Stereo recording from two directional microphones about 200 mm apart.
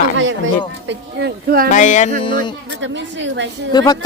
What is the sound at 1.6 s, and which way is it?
Speech, 40° left (ahead or behind).